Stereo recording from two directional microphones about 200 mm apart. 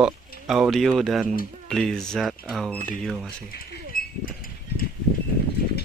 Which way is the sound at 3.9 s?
45° left (ahead or behind).